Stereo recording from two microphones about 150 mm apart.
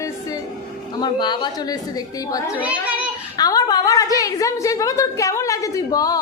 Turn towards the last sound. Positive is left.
turn(degrees=25)  # may be behind; listen again after turning